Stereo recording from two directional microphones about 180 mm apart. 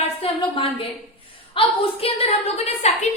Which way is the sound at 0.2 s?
30° left (ahead or behind).